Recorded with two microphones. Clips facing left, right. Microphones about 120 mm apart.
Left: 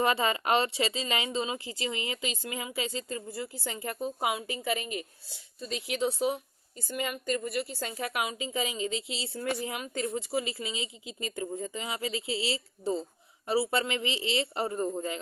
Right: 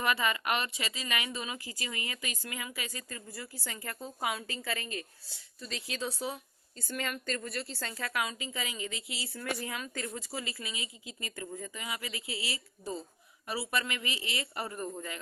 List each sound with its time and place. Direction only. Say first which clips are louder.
0.0 s a woman's voice: left 4 dB; 30° left (ahead or behind)